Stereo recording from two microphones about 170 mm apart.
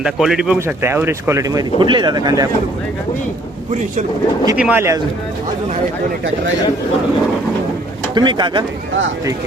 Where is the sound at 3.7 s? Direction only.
45° right (ahead or behind).